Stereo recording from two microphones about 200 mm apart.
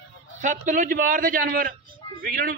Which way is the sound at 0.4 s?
40° right (ahead or behind).